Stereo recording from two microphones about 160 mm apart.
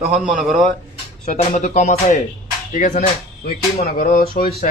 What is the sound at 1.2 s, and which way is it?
Speech, 45° left (ahead or behind).